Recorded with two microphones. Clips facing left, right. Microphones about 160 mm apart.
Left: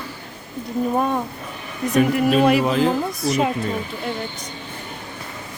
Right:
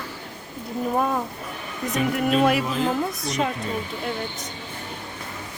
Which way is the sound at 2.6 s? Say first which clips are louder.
Left 6 dB; 75° left (ahead or behind).